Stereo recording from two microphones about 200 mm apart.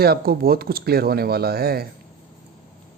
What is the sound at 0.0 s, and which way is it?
Speech, 50° right (ahead or behind).